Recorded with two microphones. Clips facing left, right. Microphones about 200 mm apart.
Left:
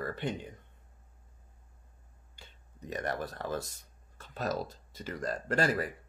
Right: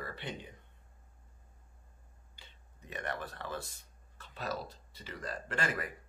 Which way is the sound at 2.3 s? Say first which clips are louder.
Left 5 dB; 45° left (ahead or behind).